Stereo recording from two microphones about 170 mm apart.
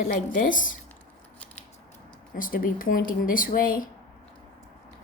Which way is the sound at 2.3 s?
55° left (ahead or behind).